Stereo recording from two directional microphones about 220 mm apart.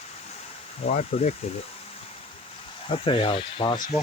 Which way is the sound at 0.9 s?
35° left (ahead or behind).